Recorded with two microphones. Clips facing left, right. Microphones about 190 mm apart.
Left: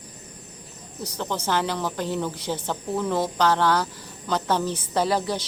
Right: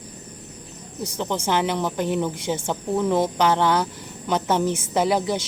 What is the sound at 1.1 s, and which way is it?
A woman's voice, 20° right (ahead or behind).